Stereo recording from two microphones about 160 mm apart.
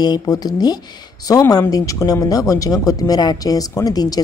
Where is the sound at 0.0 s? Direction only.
25° left (ahead or behind).